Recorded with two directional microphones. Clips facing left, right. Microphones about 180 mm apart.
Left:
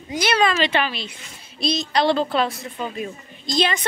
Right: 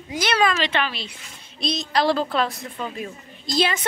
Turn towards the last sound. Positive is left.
turn(degrees=-5)  # may be behind; listen again after turning